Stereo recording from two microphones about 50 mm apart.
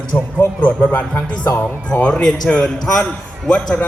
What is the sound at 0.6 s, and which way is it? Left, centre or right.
Speech, left.